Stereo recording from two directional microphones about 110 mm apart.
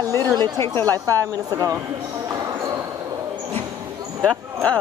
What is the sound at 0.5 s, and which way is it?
Speech, 25° left (ahead or behind).